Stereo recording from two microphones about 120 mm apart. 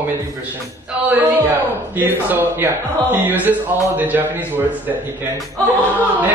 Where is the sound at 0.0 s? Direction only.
15° right (ahead or behind).